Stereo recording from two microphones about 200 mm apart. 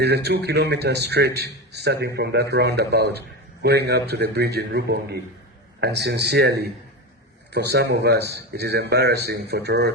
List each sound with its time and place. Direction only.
0.0 s a man's voice: 55° right (ahead or behind)